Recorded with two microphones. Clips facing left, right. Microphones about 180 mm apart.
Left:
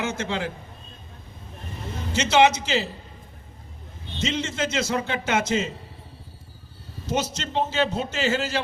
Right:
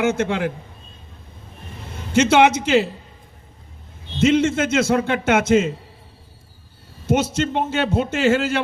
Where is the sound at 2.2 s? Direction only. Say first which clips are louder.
Right 4 dB; 55° right (ahead or behind).